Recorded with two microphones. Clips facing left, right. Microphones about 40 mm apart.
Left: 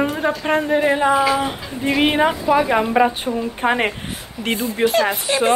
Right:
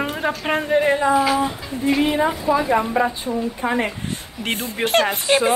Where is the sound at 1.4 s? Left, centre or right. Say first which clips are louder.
Even; left.